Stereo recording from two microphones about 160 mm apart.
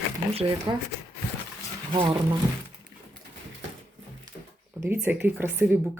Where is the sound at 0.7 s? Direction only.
25° right (ahead or behind).